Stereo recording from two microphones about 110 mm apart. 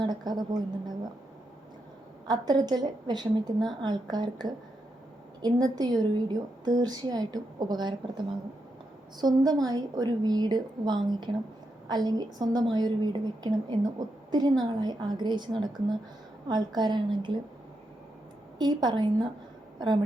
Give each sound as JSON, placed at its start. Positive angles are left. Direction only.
{"t": 0.0, "sound": "a woman's voice", "side_deg": -40}
{"t": 2.2, "sound": "a woman's voice", "side_deg": -40}
{"t": 9.2, "sound": "a woman's voice", "side_deg": -35}
{"t": 18.6, "sound": "a woman's voice", "side_deg": -40}